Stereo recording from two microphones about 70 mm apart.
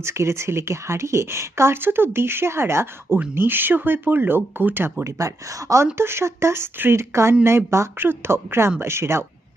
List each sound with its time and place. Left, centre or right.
0.0 s speech: right
5.0 s speech: right